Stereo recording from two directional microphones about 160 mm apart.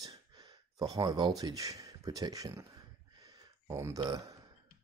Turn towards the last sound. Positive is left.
turn(degrees=-20)  # may be behind; listen again after turning